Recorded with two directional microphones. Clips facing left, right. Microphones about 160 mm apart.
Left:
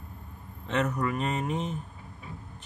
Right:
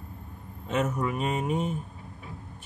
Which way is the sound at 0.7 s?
10° right (ahead or behind).